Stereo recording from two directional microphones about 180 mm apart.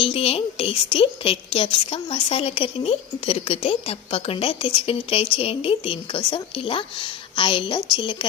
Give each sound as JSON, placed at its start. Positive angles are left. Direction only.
{"t": 0.0, "sound": "a woman's voice", "side_deg": 30}